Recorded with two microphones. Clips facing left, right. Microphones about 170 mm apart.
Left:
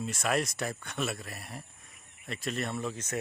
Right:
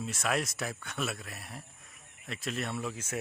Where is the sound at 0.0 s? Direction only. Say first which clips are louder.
Left 2 dB; centre (ahead or behind).